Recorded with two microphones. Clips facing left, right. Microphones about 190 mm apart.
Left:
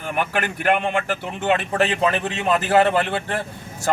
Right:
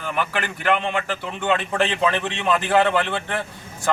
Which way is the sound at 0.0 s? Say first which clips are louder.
Left 2 dB; 45° left (ahead or behind).